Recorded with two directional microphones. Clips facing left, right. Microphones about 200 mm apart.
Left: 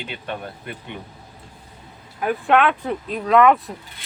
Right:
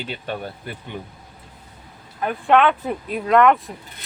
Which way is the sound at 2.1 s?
Centre (ahead or behind).